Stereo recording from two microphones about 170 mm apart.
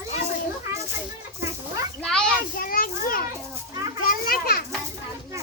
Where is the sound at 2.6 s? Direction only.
60° left (ahead or behind).